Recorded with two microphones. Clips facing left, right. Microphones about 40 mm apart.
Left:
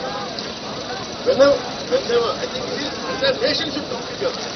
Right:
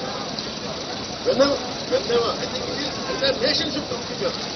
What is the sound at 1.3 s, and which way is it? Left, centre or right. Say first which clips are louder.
Speech: left 5 dB; centre.